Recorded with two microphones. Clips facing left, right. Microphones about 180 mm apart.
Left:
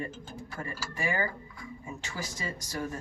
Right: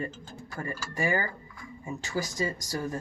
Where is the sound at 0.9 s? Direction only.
40° right (ahead or behind).